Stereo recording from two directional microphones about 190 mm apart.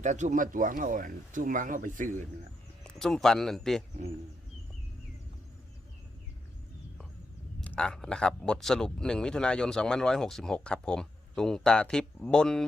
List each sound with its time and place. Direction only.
0.0 s speech: 40° right (ahead or behind)
2.8 s speech: centre (ahead or behind)
7.6 s speech: 5° left (ahead or behind)